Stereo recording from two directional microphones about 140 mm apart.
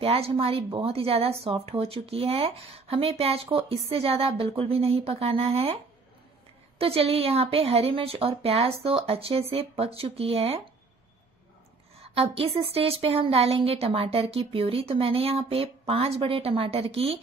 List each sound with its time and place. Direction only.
0.0 s speech: 45° right (ahead or behind)
6.8 s speech: 45° right (ahead or behind)
12.0 s speech: 45° right (ahead or behind)